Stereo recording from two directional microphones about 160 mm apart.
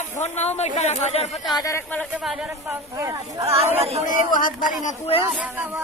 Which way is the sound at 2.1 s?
5° right (ahead or behind).